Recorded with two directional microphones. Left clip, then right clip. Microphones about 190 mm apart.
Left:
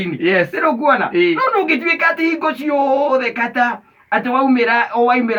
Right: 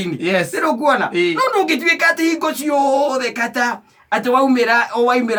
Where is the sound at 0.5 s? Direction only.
Centre (ahead or behind).